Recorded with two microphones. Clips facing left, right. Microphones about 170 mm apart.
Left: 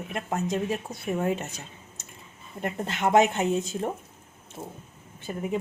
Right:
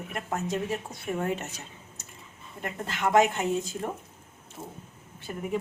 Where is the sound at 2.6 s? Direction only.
20° left (ahead or behind).